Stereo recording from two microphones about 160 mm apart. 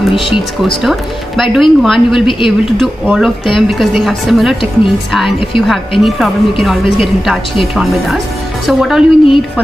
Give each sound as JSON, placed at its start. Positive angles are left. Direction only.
{"t": 0.1, "sound": "speech", "side_deg": 30}
{"t": 0.8, "sound": "a woman's voice", "side_deg": 0}
{"t": 5.7, "sound": "a woman's voice", "side_deg": 0}